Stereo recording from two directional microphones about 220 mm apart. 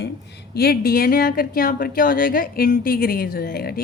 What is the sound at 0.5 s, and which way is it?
A woman's voice, 45° left (ahead or behind).